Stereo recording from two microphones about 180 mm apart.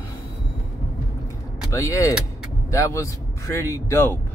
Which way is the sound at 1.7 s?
15° left (ahead or behind).